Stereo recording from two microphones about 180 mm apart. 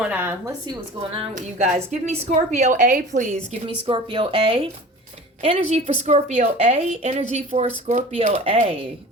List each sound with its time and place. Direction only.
0.0 s speech: 10° right (ahead or behind)
1.1 s speech: 30° right (ahead or behind)
1.4 s a woman's voice: 40° right (ahead or behind)
3.8 s a woman's voice: 25° right (ahead or behind)